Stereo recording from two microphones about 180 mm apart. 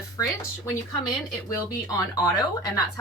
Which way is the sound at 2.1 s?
20° left (ahead or behind).